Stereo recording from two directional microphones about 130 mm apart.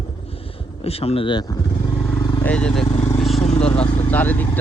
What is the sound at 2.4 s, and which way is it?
Speech, 10° left (ahead or behind).